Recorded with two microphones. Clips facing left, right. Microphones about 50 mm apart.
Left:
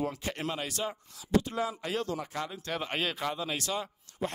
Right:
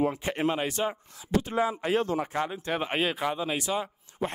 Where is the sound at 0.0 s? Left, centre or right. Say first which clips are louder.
Right 7 dB; right.